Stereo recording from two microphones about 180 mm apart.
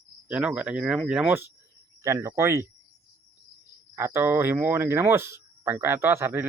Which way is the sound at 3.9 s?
15° right (ahead or behind).